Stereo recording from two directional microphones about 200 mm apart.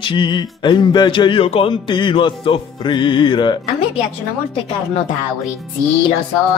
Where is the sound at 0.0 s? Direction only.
25° left (ahead or behind).